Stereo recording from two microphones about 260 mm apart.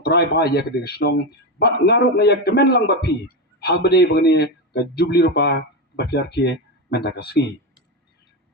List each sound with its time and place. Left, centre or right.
0.0 s speech: left